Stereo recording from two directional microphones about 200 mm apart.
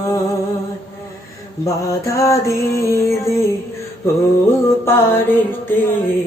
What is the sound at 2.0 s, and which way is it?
Music, 15° left (ahead or behind).